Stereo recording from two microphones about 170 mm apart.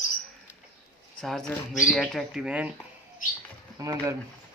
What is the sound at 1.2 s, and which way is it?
Speech, 5° left (ahead or behind).